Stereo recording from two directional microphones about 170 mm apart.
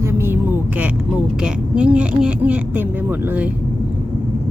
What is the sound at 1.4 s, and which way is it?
A woman's voice, 5° right (ahead or behind).